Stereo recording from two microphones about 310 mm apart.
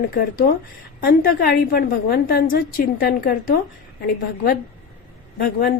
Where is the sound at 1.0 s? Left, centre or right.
Left.